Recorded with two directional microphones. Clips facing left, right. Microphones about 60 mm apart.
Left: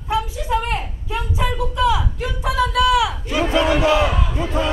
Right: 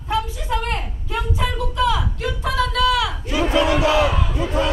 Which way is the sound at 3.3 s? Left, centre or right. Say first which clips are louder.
Right 1 dB; left.